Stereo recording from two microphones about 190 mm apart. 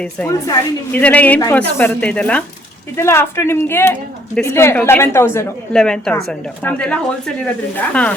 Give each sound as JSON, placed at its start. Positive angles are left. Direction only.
{"t": 0.3, "sound": "a woman's voice", "side_deg": 15}